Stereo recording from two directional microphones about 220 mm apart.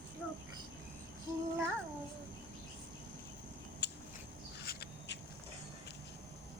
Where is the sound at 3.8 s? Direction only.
50° left (ahead or behind).